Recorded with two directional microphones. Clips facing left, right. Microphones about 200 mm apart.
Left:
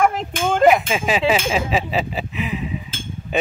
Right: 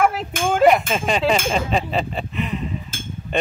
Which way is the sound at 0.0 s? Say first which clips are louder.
Left 1 dB; 5° right (ahead or behind).